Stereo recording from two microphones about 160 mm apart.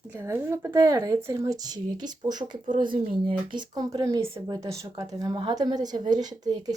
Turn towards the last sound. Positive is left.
turn(degrees=-25)  # may be behind; listen again after turning